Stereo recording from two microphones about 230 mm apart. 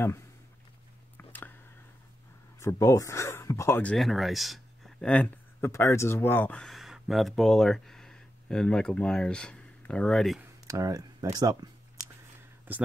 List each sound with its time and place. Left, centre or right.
1.1 s a sound: centre
2.6 s speech: centre
10.7 s speech: centre